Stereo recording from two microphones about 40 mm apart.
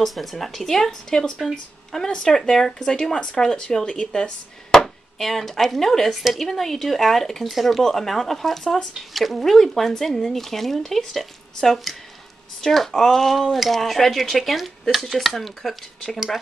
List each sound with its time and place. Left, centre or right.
0.0 s a woman's voice: centre
4.6 s speech: centre